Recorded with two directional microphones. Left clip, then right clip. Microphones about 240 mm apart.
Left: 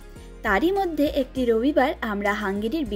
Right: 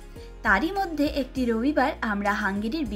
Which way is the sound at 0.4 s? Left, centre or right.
Left.